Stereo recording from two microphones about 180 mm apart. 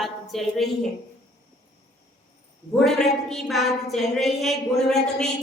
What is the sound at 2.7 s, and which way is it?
A woman's voice, centre (ahead or behind).